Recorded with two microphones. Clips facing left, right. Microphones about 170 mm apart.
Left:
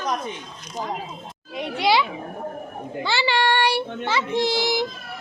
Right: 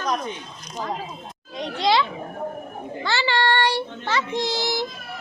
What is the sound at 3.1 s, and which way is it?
A child's voice, 15° left (ahead or behind).